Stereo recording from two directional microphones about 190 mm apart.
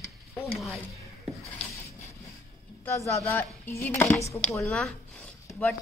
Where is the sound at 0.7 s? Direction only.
15° right (ahead or behind).